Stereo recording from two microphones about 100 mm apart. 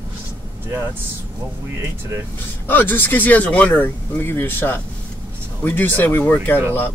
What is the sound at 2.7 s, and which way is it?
Speech, 20° left (ahead or behind).